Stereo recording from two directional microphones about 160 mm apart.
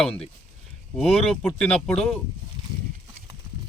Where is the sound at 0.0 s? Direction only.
5° left (ahead or behind).